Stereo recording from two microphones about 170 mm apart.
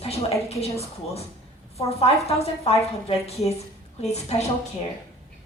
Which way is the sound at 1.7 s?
35° left (ahead or behind).